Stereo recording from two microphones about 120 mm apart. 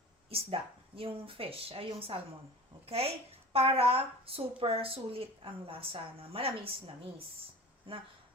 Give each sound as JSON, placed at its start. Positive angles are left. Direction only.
{"t": 0.3, "sound": "a woman's voice", "side_deg": -50}